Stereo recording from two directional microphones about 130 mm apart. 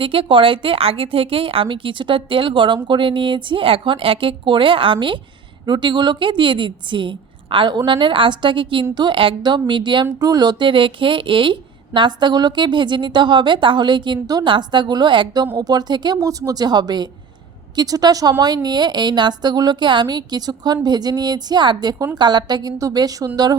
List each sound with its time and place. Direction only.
0.0 s a woman's voice: 40° right (ahead or behind)